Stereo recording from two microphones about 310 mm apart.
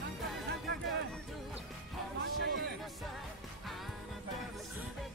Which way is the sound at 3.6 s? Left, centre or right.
Centre.